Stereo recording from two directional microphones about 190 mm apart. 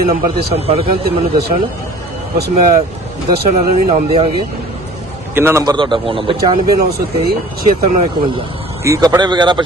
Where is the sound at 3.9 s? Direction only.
30° right (ahead or behind).